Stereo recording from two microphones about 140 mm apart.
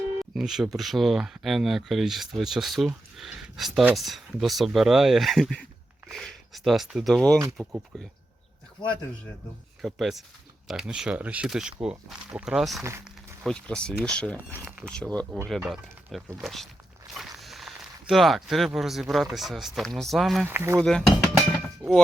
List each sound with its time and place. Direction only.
0.3 s speech: centre (ahead or behind)
9.8 s speech: centre (ahead or behind)
14.5 s speech: 15° right (ahead or behind)
14.8 s speech: 5° left (ahead or behind)
15.6 s speech: centre (ahead or behind)
20.5 s speech: 15° right (ahead or behind)
20.7 s a sound: 5° left (ahead or behind)